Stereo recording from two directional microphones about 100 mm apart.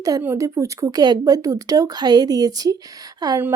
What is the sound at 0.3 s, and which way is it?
Speech, 30° right (ahead or behind).